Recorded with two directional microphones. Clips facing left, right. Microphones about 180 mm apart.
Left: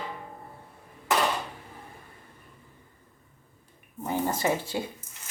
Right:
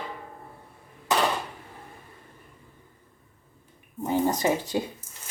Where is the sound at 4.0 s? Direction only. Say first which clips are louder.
Right 4 dB; 15° right (ahead or behind).